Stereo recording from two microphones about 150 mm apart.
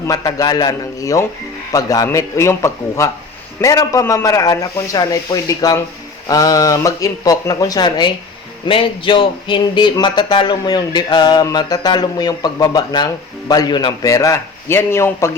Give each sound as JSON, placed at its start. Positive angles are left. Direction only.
{"t": 0.1, "sound": "speech", "side_deg": 25}